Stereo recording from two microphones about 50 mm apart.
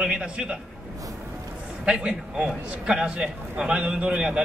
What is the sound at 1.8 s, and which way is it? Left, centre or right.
A man's voice, centre.